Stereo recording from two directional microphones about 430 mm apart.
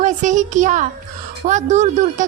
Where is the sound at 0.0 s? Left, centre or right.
Centre.